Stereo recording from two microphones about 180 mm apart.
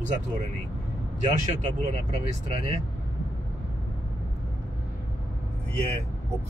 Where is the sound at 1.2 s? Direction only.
40° right (ahead or behind).